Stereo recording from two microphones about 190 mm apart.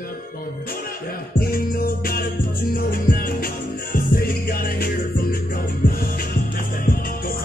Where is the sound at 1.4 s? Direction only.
50° left (ahead or behind).